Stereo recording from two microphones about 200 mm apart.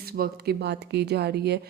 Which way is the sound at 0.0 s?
50° right (ahead or behind).